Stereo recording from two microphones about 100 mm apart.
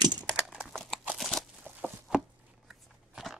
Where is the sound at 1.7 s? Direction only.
25° right (ahead or behind).